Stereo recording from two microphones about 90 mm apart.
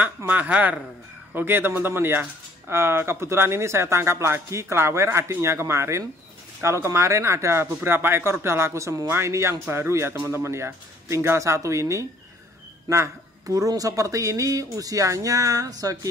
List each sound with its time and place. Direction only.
0.0 s speech: 20° right (ahead or behind); by 16.1 s 40° right (ahead or behind)